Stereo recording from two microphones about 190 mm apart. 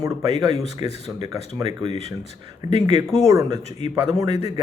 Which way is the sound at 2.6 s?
20° right (ahead or behind).